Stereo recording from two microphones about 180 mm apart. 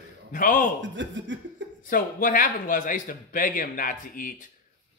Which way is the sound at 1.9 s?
50° left (ahead or behind).